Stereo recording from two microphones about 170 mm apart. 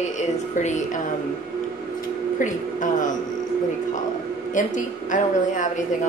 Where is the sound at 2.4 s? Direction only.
50° left (ahead or behind).